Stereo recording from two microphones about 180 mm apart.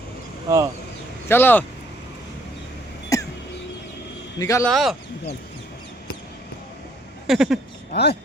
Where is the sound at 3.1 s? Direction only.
15° left (ahead or behind).